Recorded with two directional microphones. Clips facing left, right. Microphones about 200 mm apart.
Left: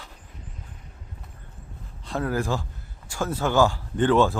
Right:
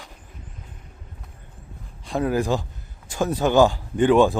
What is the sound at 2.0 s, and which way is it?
Speech, 15° right (ahead or behind).